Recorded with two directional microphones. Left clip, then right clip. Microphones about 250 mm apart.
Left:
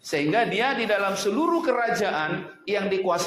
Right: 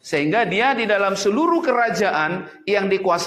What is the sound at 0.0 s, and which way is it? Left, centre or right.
A man's voice, right.